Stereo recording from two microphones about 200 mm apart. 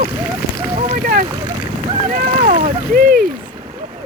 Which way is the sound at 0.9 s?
45° right (ahead or behind).